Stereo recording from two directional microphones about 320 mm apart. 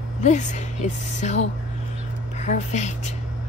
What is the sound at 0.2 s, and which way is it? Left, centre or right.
A woman's voice, left.